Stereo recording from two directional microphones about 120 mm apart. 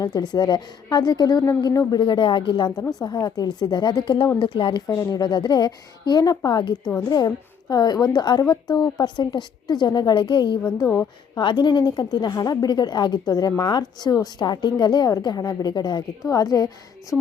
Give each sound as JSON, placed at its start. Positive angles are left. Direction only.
{"t": 0.0, "sound": "a woman's voice", "side_deg": 35}
{"t": 4.9, "sound": "a woman's voice", "side_deg": 30}